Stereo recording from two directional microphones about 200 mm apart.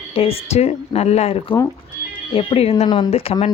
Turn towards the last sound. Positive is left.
turn(degrees=30)  # may be behind; listen again after turning